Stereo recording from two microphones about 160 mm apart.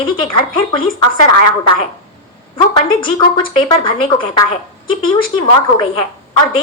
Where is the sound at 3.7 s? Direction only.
30° left (ahead or behind).